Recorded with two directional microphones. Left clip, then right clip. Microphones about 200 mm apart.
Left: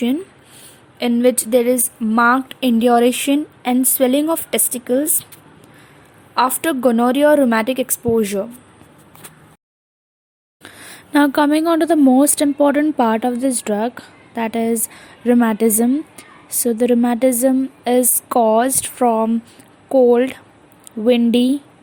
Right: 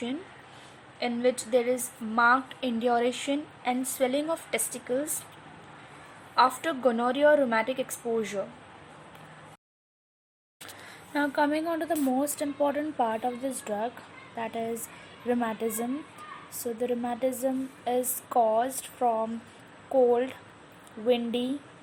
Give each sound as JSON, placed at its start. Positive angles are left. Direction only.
{"t": 0.9, "sound": "speech", "side_deg": 55}
{"t": 6.3, "sound": "a woman's voice", "side_deg": 55}
{"t": 10.8, "sound": "a woman's voice", "side_deg": 55}